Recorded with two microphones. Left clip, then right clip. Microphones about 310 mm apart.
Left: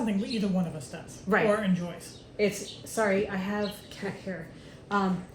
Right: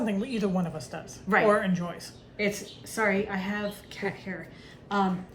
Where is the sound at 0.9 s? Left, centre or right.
Right.